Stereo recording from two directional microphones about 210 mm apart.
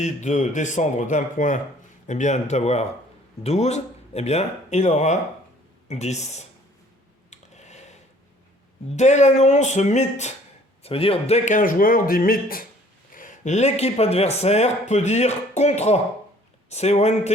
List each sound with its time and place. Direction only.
0.0 s speech: 35° left (ahead or behind)
7.3 s a sound: 35° left (ahead or behind)
9.0 s speech: 35° left (ahead or behind)